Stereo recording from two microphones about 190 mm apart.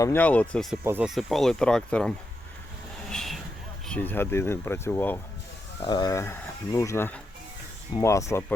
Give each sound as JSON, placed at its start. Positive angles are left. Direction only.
{"t": 0.0, "sound": "speech", "side_deg": 10}
{"t": 3.1, "sound": "vehicle", "side_deg": 0}
{"t": 3.8, "sound": "speech", "side_deg": 10}
{"t": 5.8, "sound": "speech", "side_deg": 20}